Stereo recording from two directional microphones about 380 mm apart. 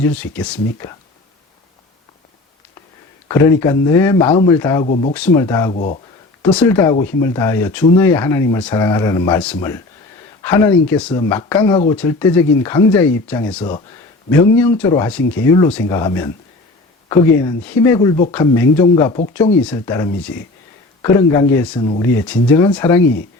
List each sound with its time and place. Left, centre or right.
0.0 s speech: centre
3.2 s speech: centre
5.7 s speech: centre
6.4 s speech: centre
17.8 s speech: centre